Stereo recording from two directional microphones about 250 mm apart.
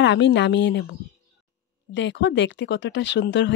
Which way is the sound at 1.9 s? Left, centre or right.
Left.